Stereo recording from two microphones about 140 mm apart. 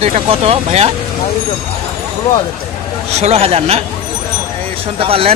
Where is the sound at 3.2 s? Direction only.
45° right (ahead or behind).